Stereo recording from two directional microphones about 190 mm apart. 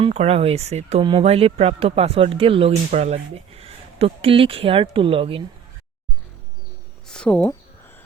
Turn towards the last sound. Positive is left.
turn(degrees=5)  # may be behind; listen again after turning